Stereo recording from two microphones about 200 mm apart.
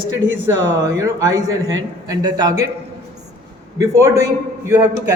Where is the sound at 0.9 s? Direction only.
15° right (ahead or behind).